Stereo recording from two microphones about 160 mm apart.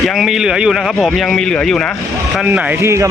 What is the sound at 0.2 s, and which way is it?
Speech, 5° right (ahead or behind).